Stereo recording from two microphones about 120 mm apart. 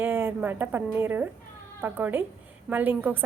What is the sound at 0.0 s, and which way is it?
A woman's voice, 20° right (ahead or behind).